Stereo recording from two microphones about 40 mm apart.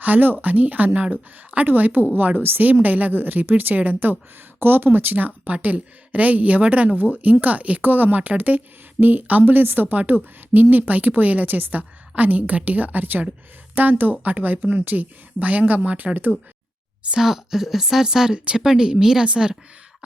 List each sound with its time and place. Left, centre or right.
0.0 s a woman's voice: right
1.6 s a woman's voice: right
4.6 s a woman's voice: right
7.8 s a woman's voice: right
17.2 s speech: centre
18.3 s speech: right
18.6 s speech: centre